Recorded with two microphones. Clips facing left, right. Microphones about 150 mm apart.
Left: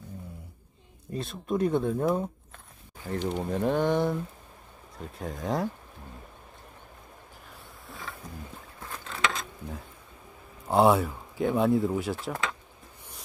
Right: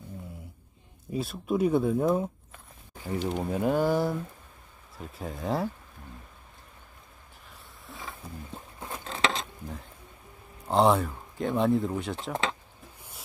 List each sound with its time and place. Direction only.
1.1 s speech: 5° right (ahead or behind)
7.9 s wild animals: centre (ahead or behind)
8.8 s a sound: 25° right (ahead or behind)
10.7 s speech: 5° left (ahead or behind)
12.2 s speech: 25° right (ahead or behind)